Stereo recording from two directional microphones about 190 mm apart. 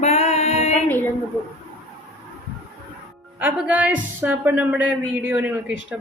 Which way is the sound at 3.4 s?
10° right (ahead or behind).